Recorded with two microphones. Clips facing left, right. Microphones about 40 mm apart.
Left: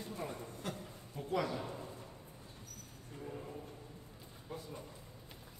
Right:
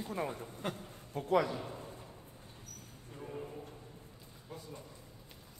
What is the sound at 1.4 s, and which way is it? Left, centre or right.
Speech, centre.